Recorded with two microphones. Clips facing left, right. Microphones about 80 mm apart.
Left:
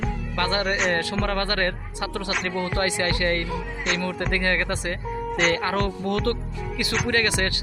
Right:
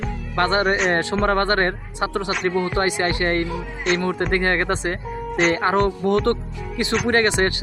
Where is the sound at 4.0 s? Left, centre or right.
Right.